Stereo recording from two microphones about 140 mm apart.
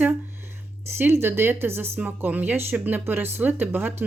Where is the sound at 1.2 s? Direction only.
15° right (ahead or behind).